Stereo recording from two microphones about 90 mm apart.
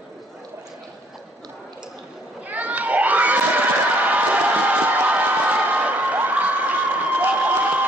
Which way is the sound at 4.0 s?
15° right (ahead or behind).